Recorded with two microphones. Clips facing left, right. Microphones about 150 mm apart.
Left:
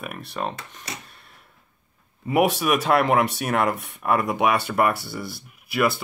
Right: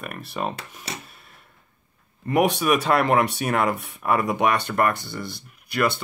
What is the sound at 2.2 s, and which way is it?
Speech, 5° left (ahead or behind).